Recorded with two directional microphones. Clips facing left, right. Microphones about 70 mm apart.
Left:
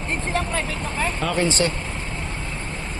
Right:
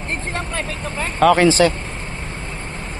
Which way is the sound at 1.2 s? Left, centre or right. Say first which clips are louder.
Right 12 dB; right.